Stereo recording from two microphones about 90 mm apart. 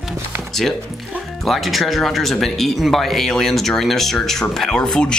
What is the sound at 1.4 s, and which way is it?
Speech, centre (ahead or behind).